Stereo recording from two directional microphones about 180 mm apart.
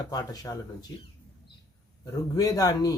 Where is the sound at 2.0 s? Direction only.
20° left (ahead or behind).